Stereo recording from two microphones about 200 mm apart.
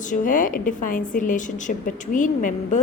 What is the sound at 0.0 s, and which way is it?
A woman's voice, 40° left (ahead or behind).